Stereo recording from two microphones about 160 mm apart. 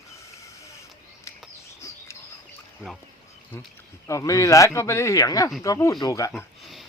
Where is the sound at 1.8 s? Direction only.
20° left (ahead or behind).